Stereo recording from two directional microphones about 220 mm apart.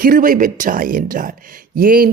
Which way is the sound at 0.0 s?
40° right (ahead or behind).